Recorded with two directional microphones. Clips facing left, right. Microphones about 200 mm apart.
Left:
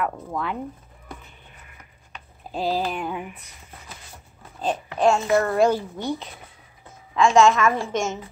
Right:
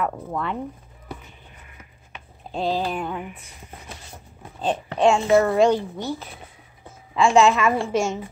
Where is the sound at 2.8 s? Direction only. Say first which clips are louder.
Right 1 dB; 5° left (ahead or behind).